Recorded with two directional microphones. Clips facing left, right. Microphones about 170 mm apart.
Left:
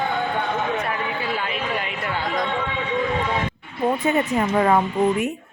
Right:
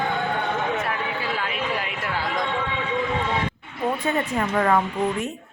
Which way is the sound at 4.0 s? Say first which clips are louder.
Left 3 dB; 20° left (ahead or behind).